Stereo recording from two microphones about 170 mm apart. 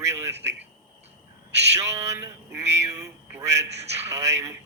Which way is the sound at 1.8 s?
15° right (ahead or behind).